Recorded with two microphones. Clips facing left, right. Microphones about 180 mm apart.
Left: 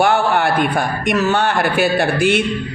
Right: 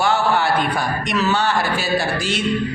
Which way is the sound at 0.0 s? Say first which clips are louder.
Left 3 dB; 55° left (ahead or behind).